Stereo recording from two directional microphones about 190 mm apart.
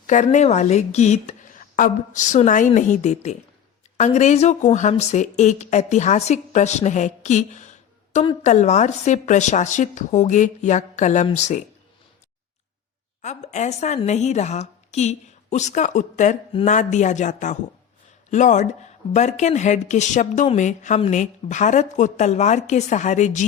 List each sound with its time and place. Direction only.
0.1 s speech: 40° left (ahead or behind)
13.2 s speech: 40° left (ahead or behind)
16.5 s speech: 30° left (ahead or behind)
16.7 s speech: 40° left (ahead or behind)